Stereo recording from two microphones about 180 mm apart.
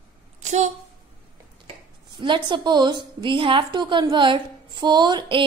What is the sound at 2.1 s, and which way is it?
A woman's voice, 25° right (ahead or behind).